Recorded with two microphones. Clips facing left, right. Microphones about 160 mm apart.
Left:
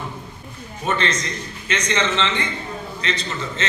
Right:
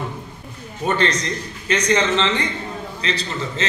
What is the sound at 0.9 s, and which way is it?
A man's voice, 40° right (ahead or behind).